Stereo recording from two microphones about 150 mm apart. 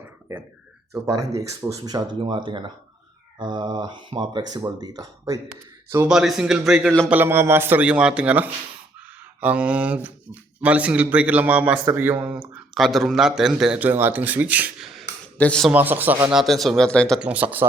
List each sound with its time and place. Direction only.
1.4 s speech: 25° right (ahead or behind)
6.0 s a man's voice: 5° right (ahead or behind)
7.1 s speech: 15° right (ahead or behind)
12.5 s a man's voice: centre (ahead or behind)
15.4 s a man's voice: 5° left (ahead or behind)
15.7 s a man's voice: 10° right (ahead or behind); by 17.2 s 5° left (ahead or behind)
17.2 s speech: 10° right (ahead or behind)